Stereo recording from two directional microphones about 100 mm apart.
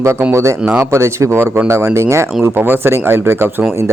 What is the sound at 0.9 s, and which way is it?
Speech, 30° right (ahead or behind).